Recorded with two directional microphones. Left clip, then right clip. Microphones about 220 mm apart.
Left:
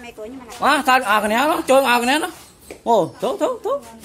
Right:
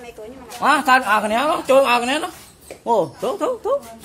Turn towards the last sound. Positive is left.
turn(degrees=15)  # may be behind; listen again after turning